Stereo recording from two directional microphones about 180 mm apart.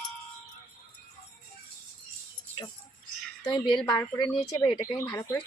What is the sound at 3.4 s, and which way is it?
A woman's voice, 25° left (ahead or behind).